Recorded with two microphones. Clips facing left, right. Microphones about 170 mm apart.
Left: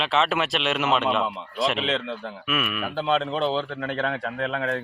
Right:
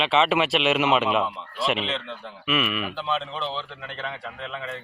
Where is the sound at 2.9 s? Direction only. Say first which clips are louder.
Left 5 dB; 50° left (ahead or behind); by 4.8 s 65° left (ahead or behind).